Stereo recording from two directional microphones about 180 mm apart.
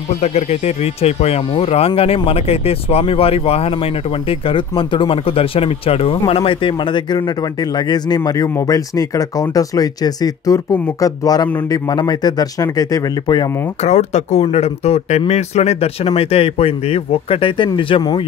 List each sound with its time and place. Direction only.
0.2 s speech: 35° left (ahead or behind); by 13.5 s 20° left (ahead or behind)
13.8 s speech: 40° left (ahead or behind)